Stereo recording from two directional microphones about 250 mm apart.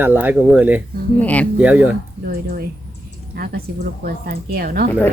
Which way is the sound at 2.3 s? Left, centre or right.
Right.